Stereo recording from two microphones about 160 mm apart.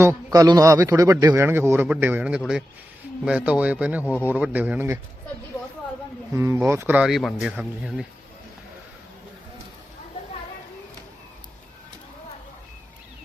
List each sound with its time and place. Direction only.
0.0 s a man's voice: 20° right (ahead or behind)
4.0 s a man's voice: 15° left (ahead or behind)
4.3 s a man's voice: 10° right (ahead or behind)
6.3 s a man's voice: 15° right (ahead or behind)